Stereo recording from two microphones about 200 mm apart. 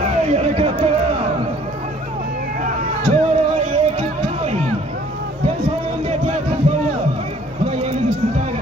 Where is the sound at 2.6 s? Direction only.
35° right (ahead or behind).